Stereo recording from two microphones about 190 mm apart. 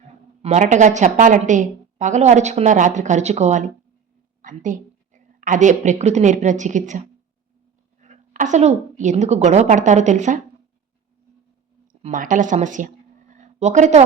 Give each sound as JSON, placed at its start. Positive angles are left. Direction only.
{"t": 0.4, "sound": "a woman's voice", "side_deg": -40}
{"t": 8.0, "sound": "a woman's voice", "side_deg": -40}
{"t": 11.9, "sound": "speech", "side_deg": -45}